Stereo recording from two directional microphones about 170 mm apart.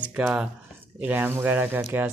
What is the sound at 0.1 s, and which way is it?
Speech, 5° right (ahead or behind).